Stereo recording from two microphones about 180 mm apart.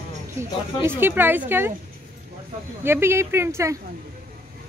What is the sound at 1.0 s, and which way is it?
Speech, 10° right (ahead or behind).